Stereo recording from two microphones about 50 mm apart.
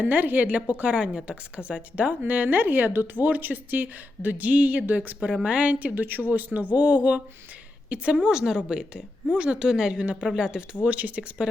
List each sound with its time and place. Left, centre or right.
0.0 s a woman's voice: right
5.3 s a woman's voice: centre
8.1 s a woman's voice: centre